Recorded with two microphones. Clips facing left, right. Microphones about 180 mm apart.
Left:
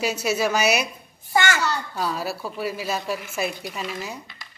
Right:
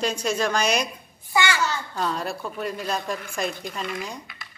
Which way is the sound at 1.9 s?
5° left (ahead or behind).